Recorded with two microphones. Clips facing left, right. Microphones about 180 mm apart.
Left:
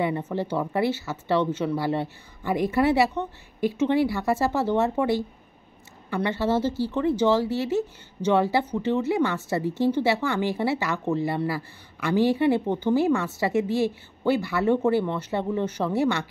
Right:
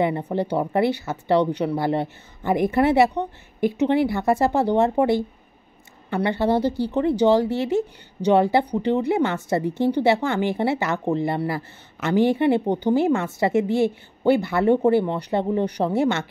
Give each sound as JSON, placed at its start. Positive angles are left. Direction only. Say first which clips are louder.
{"t": 0.2, "sound": "a woman's voice", "louder": "right 4 dB", "side_deg": -15}